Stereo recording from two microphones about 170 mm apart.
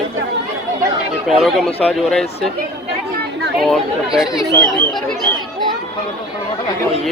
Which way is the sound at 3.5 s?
Centre (ahead or behind).